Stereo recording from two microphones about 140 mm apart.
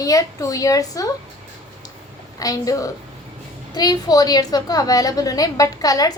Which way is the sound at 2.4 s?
25° left (ahead or behind).